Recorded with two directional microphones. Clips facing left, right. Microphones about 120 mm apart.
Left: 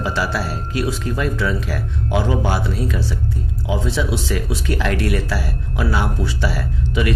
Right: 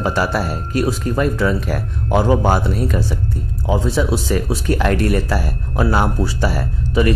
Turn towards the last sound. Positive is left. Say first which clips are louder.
# right 4 dB
turn(degrees=-40)  # may be behind; listen again after turning